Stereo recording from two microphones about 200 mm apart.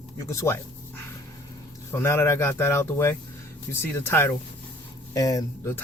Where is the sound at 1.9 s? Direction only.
10° left (ahead or behind).